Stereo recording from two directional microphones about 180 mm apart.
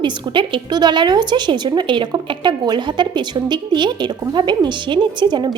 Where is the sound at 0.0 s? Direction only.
25° right (ahead or behind).